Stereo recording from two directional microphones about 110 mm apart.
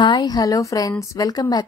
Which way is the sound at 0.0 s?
40° left (ahead or behind).